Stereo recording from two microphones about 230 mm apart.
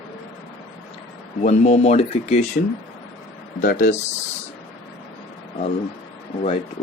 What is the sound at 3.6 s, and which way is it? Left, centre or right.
Speech, left.